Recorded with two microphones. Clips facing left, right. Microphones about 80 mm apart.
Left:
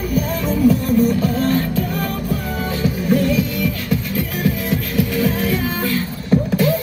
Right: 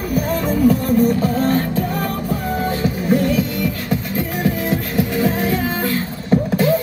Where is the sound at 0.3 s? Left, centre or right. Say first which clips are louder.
Right 1 dB; right.